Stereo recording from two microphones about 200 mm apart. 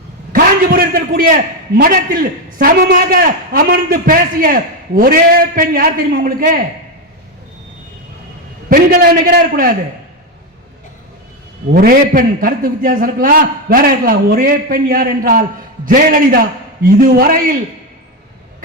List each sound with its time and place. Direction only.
0.3 s a man's voice: 50° right (ahead or behind)
8.7 s a man's voice: 50° right (ahead or behind)
11.7 s a man's voice: 45° right (ahead or behind)